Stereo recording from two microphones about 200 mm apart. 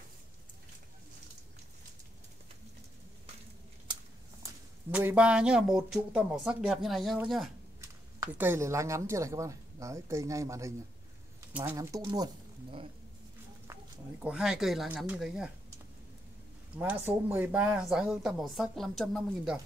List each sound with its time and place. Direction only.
4.9 s speech: 5° right (ahead or behind)
7.8 s speech: 10° right (ahead or behind)
14.2 s speech: 5° right (ahead or behind)
16.7 s speech: 10° right (ahead or behind)